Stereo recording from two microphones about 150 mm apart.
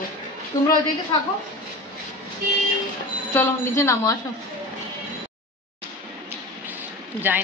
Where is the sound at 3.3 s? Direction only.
15° left (ahead or behind).